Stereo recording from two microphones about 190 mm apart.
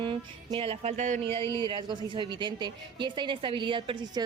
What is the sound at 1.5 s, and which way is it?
A woman's voice, 25° right (ahead or behind).